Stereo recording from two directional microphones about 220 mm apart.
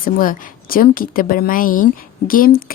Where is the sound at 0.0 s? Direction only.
40° left (ahead or behind).